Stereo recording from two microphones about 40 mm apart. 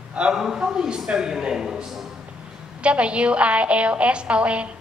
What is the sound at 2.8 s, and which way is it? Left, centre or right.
A woman's voice, right.